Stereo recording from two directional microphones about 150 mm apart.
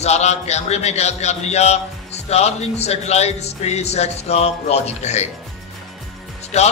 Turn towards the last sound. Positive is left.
turn(degrees=45)  # may be behind; listen again after turning